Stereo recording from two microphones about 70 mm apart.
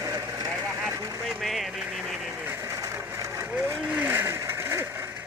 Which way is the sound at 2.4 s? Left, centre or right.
Right.